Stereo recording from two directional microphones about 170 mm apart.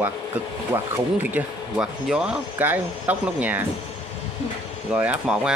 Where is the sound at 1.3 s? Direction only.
5° right (ahead or behind).